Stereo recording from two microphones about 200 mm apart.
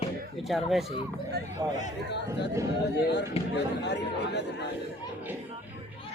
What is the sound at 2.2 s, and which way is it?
Speech, 15° right (ahead or behind).